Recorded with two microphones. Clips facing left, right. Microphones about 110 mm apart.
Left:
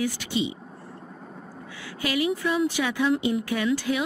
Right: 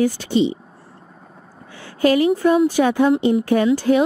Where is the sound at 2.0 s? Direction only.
45° right (ahead or behind).